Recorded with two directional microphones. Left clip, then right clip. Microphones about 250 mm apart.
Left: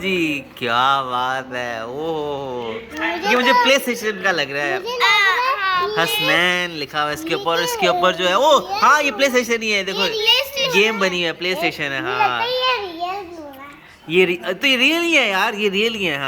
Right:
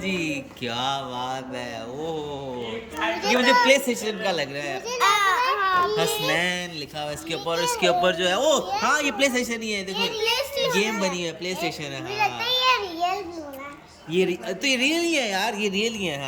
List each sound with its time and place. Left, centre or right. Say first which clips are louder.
0.0 s speech: left 7 dB; centre
3.3 s speech: left 3 dB; centre
4.9 s children playing: left 4 dB; right
6.3 s speech: left 8 dB; centre
9.9 s a child's voice: left 6 dB; centre
10.8 s speech: left 8 dB; centre
14.1 s speech: left 7 dB; centre